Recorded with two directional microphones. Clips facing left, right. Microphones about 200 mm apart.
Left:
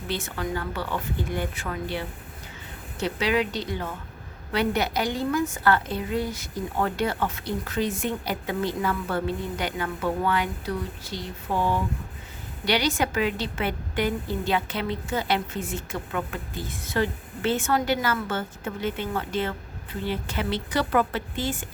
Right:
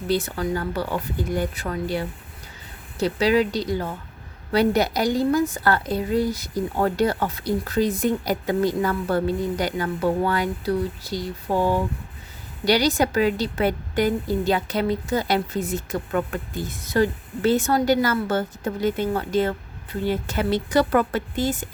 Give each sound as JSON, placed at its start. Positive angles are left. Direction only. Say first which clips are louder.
{"t": 0.1, "sound": "a woman's voice", "louder": "right 6 dB", "side_deg": -35}
{"t": 12.6, "sound": "a woman's voice", "louder": "right 5 dB", "side_deg": -40}